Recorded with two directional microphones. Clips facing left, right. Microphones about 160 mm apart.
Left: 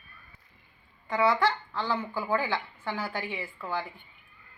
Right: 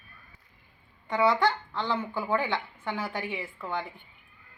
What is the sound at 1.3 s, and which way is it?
Speech, 20° right (ahead or behind).